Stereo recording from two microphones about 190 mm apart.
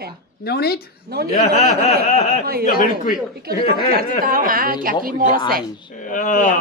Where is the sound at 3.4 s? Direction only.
50° right (ahead or behind).